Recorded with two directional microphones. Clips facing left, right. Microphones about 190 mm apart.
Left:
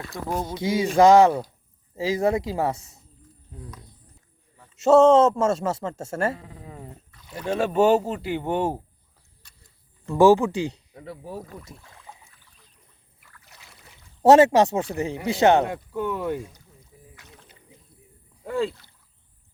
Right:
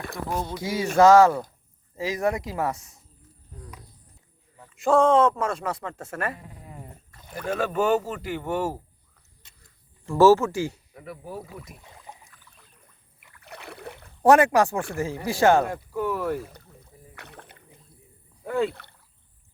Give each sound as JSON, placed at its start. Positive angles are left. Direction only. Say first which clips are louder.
{"t": 0.5, "sound": "speech", "louder": "left 2 dB", "side_deg": 20}
{"t": 4.8, "sound": "speech", "louder": "left 4 dB", "side_deg": 25}
{"t": 9.4, "sound": "insect", "louder": "left 1 dB", "side_deg": -20}
{"t": 10.2, "sound": "speech", "louder": "left 1 dB", "side_deg": 15}
{"t": 11.3, "sound": "speech", "louder": "left 1 dB", "side_deg": -10}
{"t": 11.8, "sound": "a sound", "louder": "right 1 dB", "side_deg": -20}
{"t": 13.4, "sound": "boat", "louder": "right 16 dB", "side_deg": -65}
{"t": 14.2, "sound": "speech", "louder": "left 3 dB", "side_deg": 25}
{"t": 16.4, "sound": "rowboat", "louder": "even", "side_deg": -60}